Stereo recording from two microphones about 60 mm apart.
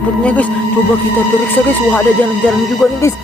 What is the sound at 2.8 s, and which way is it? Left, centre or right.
Music, centre.